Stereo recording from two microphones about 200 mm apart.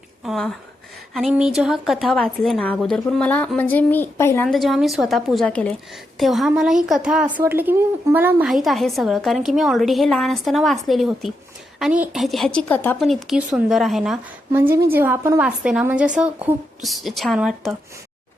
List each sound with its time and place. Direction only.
0.3 s speech: centre (ahead or behind)
4.4 s speech: centre (ahead or behind)